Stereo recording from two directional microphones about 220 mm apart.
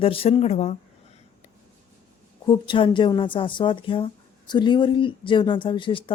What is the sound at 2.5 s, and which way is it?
A woman's voice, 20° left (ahead or behind).